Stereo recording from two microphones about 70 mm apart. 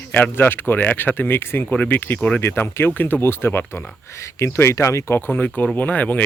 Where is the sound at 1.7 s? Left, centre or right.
Centre.